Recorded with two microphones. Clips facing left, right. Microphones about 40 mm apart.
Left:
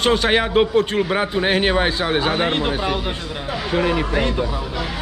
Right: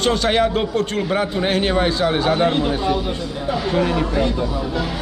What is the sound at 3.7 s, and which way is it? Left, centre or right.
Speech, left.